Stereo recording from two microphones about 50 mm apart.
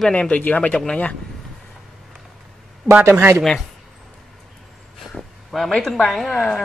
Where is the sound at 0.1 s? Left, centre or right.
Left.